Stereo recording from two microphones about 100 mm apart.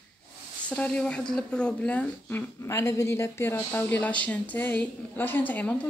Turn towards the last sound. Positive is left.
turn(degrees=15)  # may be behind; listen again after turning